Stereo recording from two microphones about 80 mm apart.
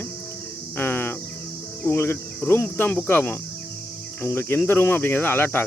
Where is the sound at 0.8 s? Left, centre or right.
Left.